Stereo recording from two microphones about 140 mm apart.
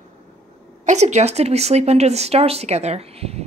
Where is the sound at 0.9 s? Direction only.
55° right (ahead or behind).